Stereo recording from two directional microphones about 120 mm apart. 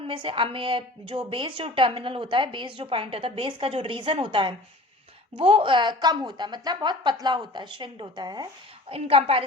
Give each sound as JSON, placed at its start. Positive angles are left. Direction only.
{"t": 0.1, "sound": "a woman's voice", "side_deg": -45}
{"t": 8.9, "sound": "a woman's voice", "side_deg": -50}